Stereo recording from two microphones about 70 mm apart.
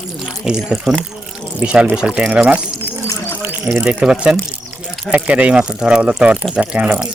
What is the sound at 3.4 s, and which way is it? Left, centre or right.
Water, right.